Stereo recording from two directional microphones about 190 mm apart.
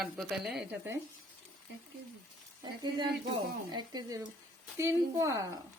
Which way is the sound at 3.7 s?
20° right (ahead or behind).